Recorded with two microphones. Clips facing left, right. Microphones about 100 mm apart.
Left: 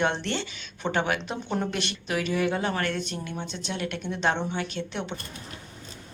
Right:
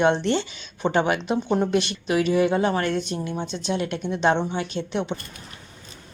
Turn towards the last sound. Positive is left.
turn(degrees=-20)  # may be behind; listen again after turning